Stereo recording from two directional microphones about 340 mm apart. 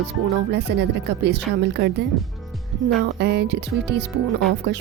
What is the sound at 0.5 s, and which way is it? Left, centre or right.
A woman's voice, right.